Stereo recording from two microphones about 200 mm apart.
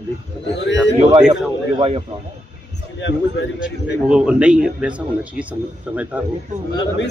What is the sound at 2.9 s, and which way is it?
Speech, 60° left (ahead or behind).